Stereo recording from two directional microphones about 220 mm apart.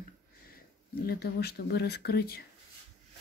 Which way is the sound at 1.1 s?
45° left (ahead or behind).